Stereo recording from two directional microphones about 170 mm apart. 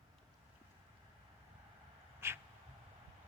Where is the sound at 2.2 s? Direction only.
15° right (ahead or behind).